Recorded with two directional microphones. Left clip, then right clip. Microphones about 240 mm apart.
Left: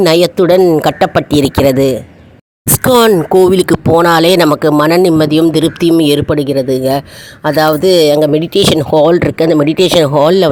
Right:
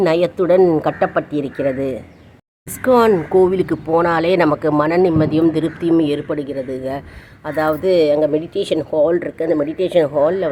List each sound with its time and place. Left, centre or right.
0.0 s speech: left